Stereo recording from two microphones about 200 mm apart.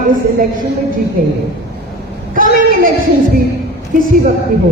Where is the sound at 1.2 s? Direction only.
45° right (ahead or behind).